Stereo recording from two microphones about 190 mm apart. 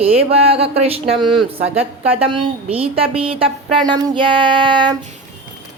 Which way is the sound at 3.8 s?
25° right (ahead or behind).